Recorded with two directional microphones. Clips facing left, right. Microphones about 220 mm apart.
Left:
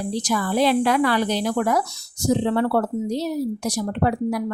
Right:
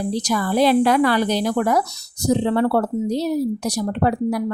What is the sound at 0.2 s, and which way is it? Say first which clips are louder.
A woman's voice: right 2 dB; 40° right (ahead or behind).